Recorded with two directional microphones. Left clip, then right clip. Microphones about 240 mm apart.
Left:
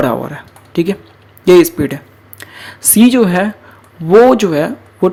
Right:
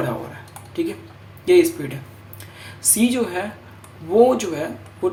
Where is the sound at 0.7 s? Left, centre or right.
Left.